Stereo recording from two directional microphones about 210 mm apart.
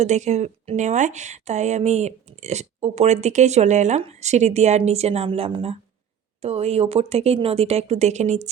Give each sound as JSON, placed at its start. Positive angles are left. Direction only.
{"t": 0.0, "sound": "a woman's voice", "side_deg": -35}